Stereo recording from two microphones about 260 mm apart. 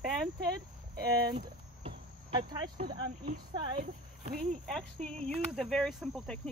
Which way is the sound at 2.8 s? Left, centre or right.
Right.